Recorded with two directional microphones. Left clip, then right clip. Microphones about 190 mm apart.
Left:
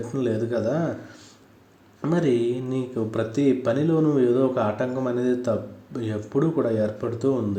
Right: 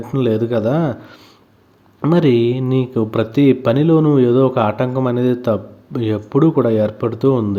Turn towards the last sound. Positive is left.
turn(degrees=-40)  # may be behind; listen again after turning